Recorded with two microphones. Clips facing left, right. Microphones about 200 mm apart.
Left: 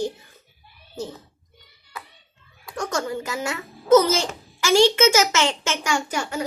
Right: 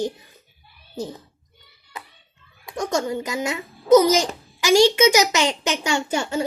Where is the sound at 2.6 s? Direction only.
20° right (ahead or behind).